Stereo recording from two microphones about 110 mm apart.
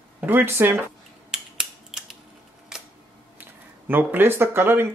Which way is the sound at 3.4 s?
20° right (ahead or behind).